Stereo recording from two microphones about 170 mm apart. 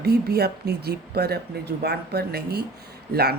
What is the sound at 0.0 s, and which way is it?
Speech, 70° right (ahead or behind).